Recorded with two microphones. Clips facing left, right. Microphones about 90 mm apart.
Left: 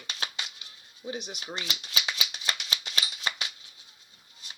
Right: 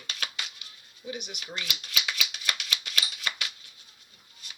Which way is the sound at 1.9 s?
30° left (ahead or behind).